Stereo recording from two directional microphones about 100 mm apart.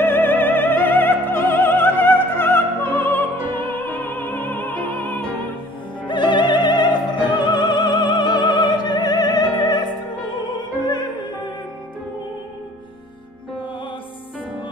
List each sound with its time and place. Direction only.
0.0 s opera: 20° left (ahead or behind)
6.0 s opera: 50° left (ahead or behind)